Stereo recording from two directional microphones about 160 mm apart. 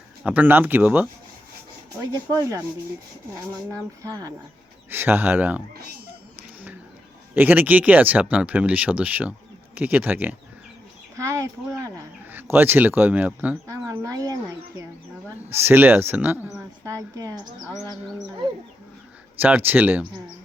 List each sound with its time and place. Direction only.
0.2 s speech: 10° right (ahead or behind)
2.1 s speech: 20° right (ahead or behind)
3.7 s speech: 20° right (ahead or behind)
7.3 s speech: 10° right (ahead or behind)
11.2 s a sound: 20° right (ahead or behind)
12.3 s speech: 10° right (ahead or behind)
15.4 s a woman's voice: 15° right (ahead or behind)
19.4 s speech: 10° right (ahead or behind)